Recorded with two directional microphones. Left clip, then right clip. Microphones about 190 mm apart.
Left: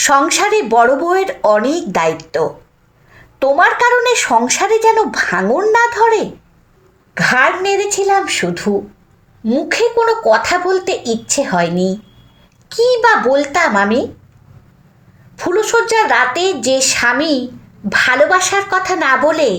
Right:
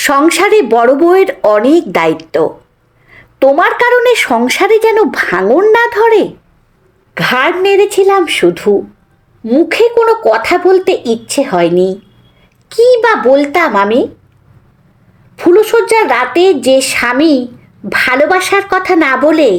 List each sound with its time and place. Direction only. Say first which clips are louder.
0.0 s speech: right 3 dB; 40° right (ahead or behind)
15.4 s speech: right 6 dB; 40° right (ahead or behind)